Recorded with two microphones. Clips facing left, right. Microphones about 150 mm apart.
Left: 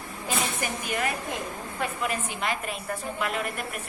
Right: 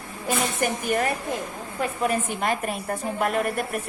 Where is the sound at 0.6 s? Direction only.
45° right (ahead or behind).